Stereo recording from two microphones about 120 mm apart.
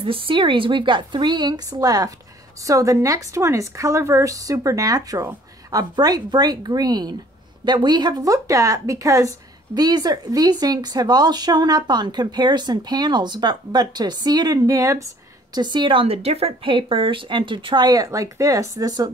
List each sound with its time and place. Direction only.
0.0 s a woman's voice: 50° right (ahead or behind); by 15.0 s 25° right (ahead or behind)
15.5 s a woman's voice: 40° right (ahead or behind)